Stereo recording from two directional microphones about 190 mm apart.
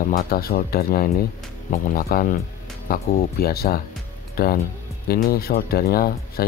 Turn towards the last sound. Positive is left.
turn(degrees=55)  # may be behind; listen again after turning